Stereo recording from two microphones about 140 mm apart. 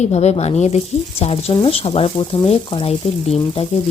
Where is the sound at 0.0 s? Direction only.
50° left (ahead or behind).